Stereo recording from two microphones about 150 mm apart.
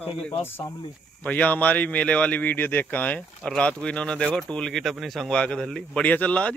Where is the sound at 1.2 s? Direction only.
10° left (ahead or behind).